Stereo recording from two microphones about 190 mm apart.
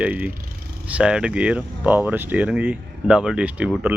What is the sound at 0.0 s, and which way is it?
Speech, 10° right (ahead or behind).